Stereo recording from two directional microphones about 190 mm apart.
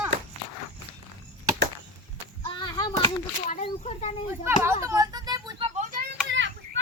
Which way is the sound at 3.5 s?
35° left (ahead or behind).